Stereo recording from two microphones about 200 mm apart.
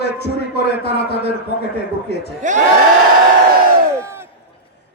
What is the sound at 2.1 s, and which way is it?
Speech, 55° left (ahead or behind).